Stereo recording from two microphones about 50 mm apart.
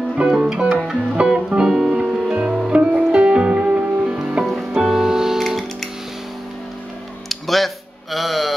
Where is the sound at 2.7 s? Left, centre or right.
Right.